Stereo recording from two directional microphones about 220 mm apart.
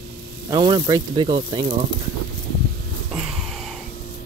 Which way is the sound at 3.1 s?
Centre (ahead or behind).